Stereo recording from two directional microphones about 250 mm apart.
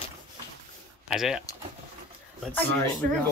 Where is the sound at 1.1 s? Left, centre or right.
Centre.